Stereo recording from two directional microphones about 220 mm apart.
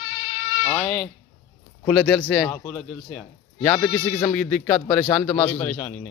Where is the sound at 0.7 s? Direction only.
5° left (ahead or behind).